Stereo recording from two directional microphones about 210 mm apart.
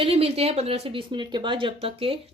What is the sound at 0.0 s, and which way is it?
A woman's voice, 25° right (ahead or behind).